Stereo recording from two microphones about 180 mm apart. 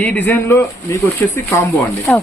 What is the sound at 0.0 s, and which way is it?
Speech, 10° left (ahead or behind).